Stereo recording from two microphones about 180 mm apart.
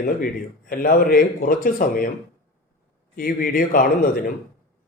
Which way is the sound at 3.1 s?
50° left (ahead or behind).